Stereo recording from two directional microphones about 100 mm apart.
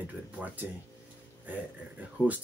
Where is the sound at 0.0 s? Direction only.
15° right (ahead or behind).